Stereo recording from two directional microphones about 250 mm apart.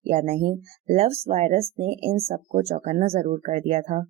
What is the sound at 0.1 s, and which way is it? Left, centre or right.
Speech, right.